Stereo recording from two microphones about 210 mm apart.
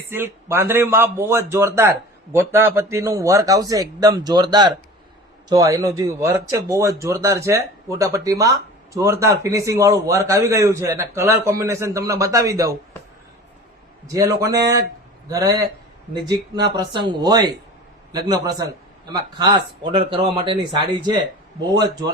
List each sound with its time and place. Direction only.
0.1 s speech: 10° right (ahead or behind)
14.1 s speech: 15° right (ahead or behind)